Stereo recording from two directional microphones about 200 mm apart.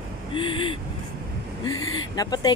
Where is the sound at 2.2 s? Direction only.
20° left (ahead or behind).